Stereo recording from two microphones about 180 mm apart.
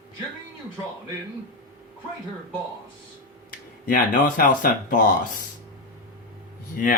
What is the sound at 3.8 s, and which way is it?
Speech, 50° left (ahead or behind).